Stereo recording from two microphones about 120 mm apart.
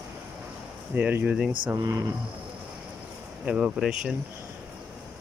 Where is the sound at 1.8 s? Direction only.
30° right (ahead or behind).